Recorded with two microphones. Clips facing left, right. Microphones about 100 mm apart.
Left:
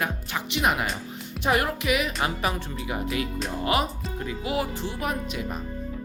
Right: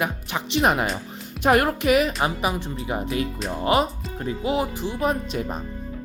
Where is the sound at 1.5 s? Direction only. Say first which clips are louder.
Right 5 dB; 50° right (ahead or behind).